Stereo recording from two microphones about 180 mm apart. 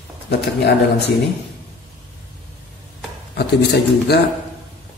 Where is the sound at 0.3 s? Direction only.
70° left (ahead or behind).